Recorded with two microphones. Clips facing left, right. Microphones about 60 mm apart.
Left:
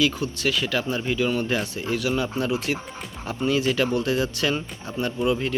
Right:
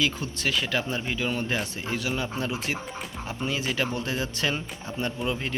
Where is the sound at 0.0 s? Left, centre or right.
Right.